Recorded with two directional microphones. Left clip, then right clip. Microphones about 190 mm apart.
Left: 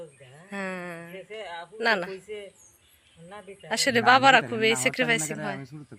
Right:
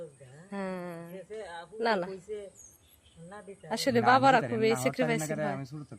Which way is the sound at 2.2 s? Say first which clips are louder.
Left 1 dB; 35° left (ahead or behind).